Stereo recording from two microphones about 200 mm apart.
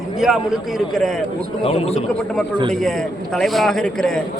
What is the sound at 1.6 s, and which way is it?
Speech, 30° left (ahead or behind).